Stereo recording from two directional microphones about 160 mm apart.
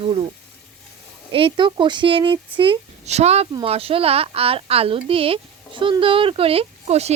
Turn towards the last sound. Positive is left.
turn(degrees=-40)  # may be behind; listen again after turning